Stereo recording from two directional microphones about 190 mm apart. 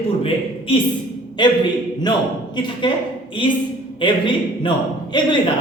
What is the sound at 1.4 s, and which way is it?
Speech, 25° left (ahead or behind).